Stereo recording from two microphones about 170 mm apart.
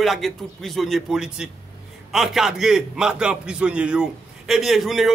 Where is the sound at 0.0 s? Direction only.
Centre (ahead or behind).